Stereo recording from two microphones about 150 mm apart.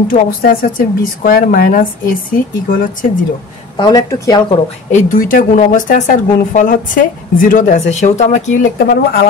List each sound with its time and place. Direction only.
0.1 s a woman's voice: 75° left (ahead or behind)
3.7 s speech: 30° left (ahead or behind)
4.9 s speech: 65° left (ahead or behind); by 8.5 s 50° left (ahead or behind)
8.7 s speech: 80° left